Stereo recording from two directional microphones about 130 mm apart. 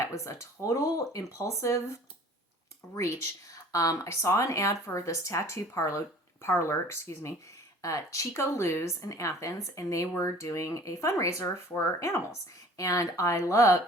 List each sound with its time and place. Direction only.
0.0 s speech: 25° left (ahead or behind)
2.9 s speech: 25° left (ahead or behind)